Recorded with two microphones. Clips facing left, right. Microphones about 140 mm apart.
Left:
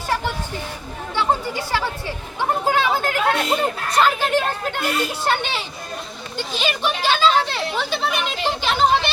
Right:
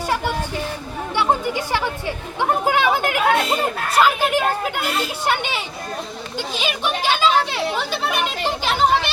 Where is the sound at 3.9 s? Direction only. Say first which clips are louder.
Right 1 dB; 10° right (ahead or behind).